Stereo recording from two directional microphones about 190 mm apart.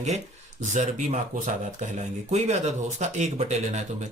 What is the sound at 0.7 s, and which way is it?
Speech, 40° right (ahead or behind).